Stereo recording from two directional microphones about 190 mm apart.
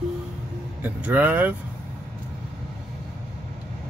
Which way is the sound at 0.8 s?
10° right (ahead or behind).